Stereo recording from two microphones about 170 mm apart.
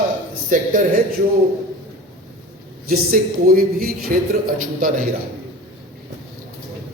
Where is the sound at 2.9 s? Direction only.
60° right (ahead or behind).